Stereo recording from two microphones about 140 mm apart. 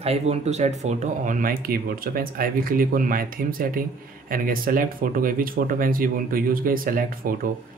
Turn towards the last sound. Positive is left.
turn(degrees=-90)